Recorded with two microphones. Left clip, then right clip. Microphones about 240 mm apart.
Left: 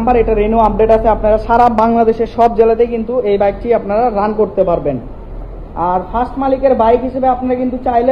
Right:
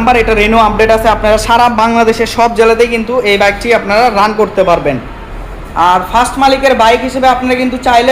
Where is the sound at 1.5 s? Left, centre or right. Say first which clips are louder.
Right 1 dB; right.